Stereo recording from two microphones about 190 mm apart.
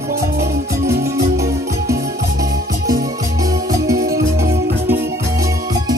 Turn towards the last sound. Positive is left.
turn(degrees=-15)  # may be behind; listen again after turning